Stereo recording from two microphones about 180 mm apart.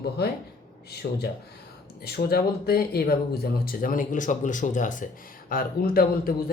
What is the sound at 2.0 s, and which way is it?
Speech, 60° left (ahead or behind).